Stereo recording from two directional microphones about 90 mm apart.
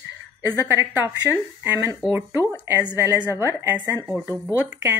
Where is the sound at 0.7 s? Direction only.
25° right (ahead or behind).